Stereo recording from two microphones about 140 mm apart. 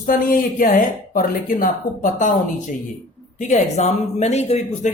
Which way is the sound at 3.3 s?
55° left (ahead or behind).